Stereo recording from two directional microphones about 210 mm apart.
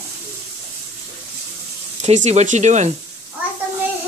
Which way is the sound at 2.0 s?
35° right (ahead or behind).